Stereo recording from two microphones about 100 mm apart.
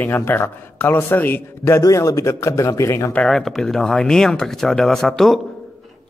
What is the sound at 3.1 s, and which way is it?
Speech, 5° left (ahead or behind).